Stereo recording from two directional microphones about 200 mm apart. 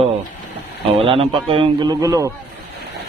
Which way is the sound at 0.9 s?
30° right (ahead or behind).